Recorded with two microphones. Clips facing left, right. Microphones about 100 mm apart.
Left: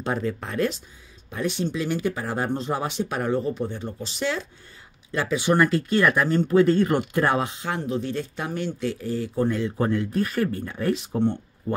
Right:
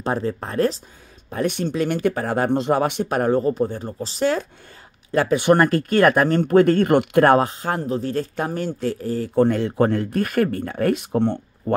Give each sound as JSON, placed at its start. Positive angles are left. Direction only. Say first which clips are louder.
{"t": 0.0, "sound": "speech", "louder": "right 3 dB", "side_deg": -35}
{"t": 1.3, "sound": "speech", "louder": "right 4 dB", "side_deg": -55}
{"t": 5.1, "sound": "speech", "louder": "right 6 dB", "side_deg": -55}
{"t": 7.3, "sound": "speech", "louder": "right 6 dB", "side_deg": -45}
{"t": 9.3, "sound": "speech", "louder": "right 8 dB", "side_deg": -65}